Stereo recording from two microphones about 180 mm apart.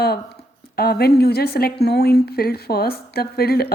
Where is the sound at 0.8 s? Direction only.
60° left (ahead or behind).